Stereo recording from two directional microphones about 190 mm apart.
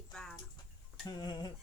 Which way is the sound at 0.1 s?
5° left (ahead or behind).